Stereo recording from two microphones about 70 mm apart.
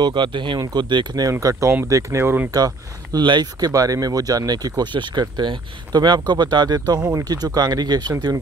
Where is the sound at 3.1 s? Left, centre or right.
Right.